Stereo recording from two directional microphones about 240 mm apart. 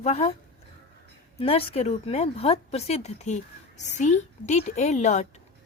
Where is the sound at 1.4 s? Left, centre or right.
Left.